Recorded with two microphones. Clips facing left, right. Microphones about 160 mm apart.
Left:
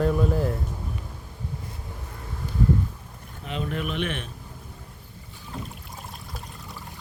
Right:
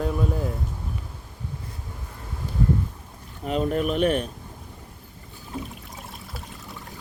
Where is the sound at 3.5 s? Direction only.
40° right (ahead or behind).